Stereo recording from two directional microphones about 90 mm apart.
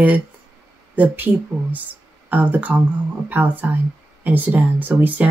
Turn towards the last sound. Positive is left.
turn(degrees=-20)  # may be behind; listen again after turning